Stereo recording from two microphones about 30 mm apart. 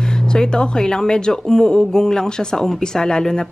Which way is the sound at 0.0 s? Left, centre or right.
Left.